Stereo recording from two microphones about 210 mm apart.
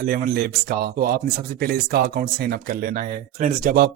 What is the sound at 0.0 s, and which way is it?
Speech, 45° right (ahead or behind).